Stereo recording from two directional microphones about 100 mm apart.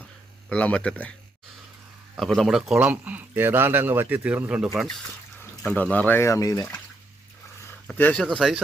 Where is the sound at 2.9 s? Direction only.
15° right (ahead or behind).